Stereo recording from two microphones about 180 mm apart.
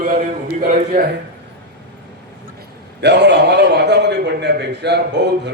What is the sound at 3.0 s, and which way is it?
A man's voice, 70° right (ahead or behind).